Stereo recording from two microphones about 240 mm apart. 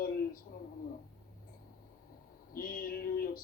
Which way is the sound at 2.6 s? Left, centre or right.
Left.